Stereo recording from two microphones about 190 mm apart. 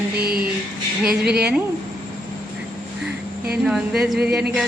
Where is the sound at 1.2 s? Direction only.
60° right (ahead or behind).